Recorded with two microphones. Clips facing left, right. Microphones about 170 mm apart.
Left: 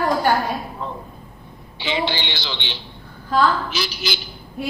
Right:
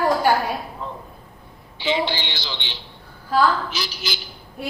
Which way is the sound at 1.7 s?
75° left (ahead or behind).